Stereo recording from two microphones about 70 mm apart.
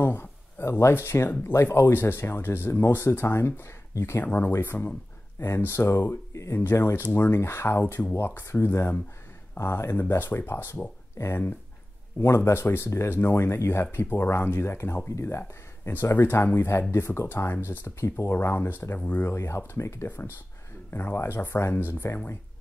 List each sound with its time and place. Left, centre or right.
0.0 s a sound: left
1.4 s speech: left
4.2 s speech: left
18.3 s speech: left
18.9 s speech: left
19.2 s speech: left